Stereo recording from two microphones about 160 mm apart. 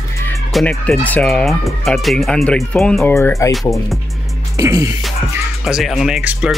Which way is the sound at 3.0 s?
20° left (ahead or behind).